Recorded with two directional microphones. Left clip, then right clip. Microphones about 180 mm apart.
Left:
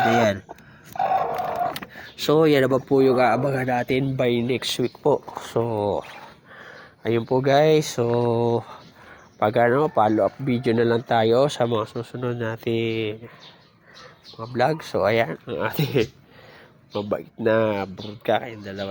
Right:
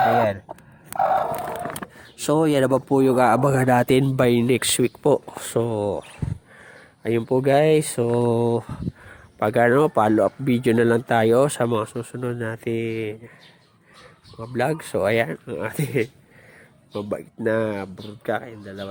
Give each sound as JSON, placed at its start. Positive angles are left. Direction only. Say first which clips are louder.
{"t": 0.9, "sound": "a sound", "louder": "right 2 dB", "side_deg": -40}
{"t": 1.7, "sound": "speech", "louder": "left 2 dB", "side_deg": -20}
{"t": 6.6, "sound": "speech", "louder": "left 5 dB", "side_deg": -15}
{"t": 14.3, "sound": "speech", "louder": "left 2 dB", "side_deg": -30}
{"t": 15.5, "sound": "speech", "louder": "left 2 dB", "side_deg": -15}